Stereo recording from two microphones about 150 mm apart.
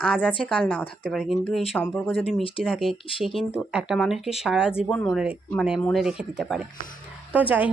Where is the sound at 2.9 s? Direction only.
35° left (ahead or behind).